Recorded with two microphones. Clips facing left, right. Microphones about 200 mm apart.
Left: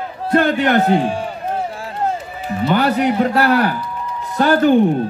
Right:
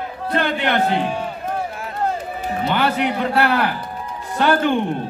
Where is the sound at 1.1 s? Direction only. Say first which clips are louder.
Left 3 dB; 30° left (ahead or behind).